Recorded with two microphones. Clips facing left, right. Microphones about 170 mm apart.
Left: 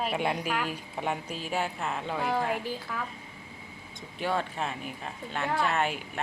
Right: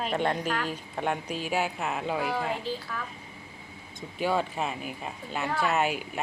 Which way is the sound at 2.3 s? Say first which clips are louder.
Left 1 dB; 15° left (ahead or behind).